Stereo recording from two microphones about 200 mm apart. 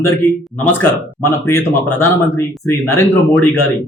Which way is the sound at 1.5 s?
10° left (ahead or behind).